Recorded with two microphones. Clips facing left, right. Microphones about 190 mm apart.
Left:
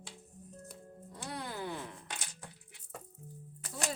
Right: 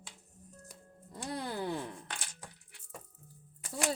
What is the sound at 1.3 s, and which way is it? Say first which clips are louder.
Speech: right 4 dB; 35° right (ahead or behind).